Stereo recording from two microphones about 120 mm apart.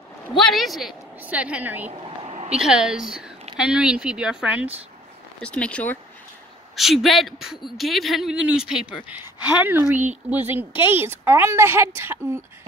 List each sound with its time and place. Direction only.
0.4 s a woman's voice: centre (ahead or behind)
1.2 s speech: 10° right (ahead or behind)
1.9 s a sound: 55° right (ahead or behind)
2.5 s a woman's voice: 5° right (ahead or behind)
5.4 s speech: 10° left (ahead or behind)
6.7 s a woman's voice: centre (ahead or behind)
9.1 s a woman's voice: 15° right (ahead or behind)